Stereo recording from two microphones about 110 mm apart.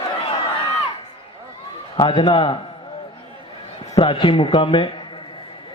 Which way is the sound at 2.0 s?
50° left (ahead or behind).